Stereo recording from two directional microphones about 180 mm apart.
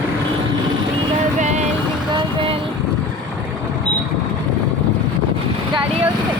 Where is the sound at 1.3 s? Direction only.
40° right (ahead or behind).